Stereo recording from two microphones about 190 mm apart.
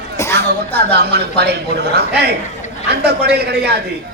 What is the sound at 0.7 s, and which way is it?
A man's voice, 60° right (ahead or behind).